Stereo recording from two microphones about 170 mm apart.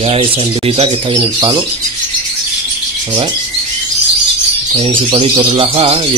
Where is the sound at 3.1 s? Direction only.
35° right (ahead or behind).